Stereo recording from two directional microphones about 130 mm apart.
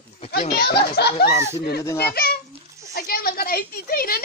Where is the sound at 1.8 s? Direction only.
20° left (ahead or behind).